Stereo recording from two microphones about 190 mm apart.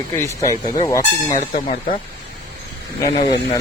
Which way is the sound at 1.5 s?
45° left (ahead or behind).